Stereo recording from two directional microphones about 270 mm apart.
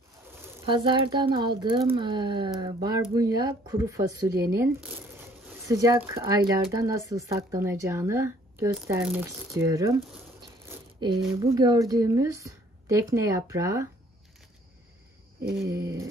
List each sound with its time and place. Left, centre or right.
0.4 s speech: centre
11.3 s speech: centre
15.5 s speech: centre